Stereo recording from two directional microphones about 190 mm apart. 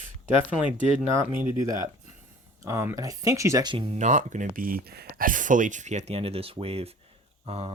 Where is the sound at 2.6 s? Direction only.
15° right (ahead or behind).